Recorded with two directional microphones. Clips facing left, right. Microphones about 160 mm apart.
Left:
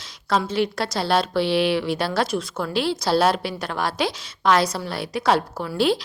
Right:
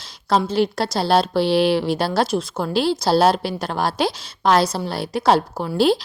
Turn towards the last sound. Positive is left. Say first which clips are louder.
# right 3 dB
turn(degrees=-35)  # may be behind; listen again after turning